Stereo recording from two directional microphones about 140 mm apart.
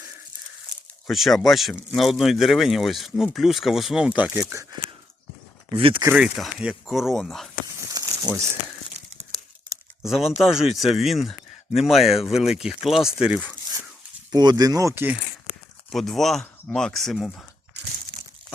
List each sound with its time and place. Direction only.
1.0 s a man's voice: centre (ahead or behind)
5.7 s speech: 40° right (ahead or behind)
6.1 s a man's voice: 5° right (ahead or behind)
8.0 s crumpling: 30° right (ahead or behind)
10.1 s a man's voice: centre (ahead or behind)
14.3 s speech: 30° right (ahead or behind)
15.9 s a man's voice: centre (ahead or behind)